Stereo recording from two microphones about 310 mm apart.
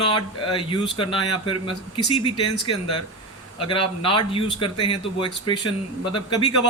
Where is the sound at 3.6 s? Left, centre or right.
Centre.